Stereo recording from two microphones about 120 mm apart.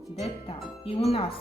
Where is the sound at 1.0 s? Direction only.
60° left (ahead or behind).